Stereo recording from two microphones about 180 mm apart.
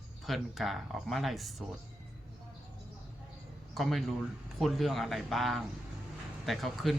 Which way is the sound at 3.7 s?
Centre (ahead or behind).